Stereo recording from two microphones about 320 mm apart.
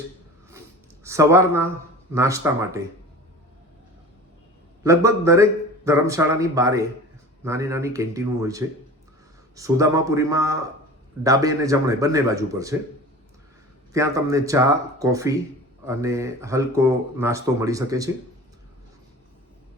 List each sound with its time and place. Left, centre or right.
1.0 s speech: centre
4.8 s speech: centre
13.9 s speech: centre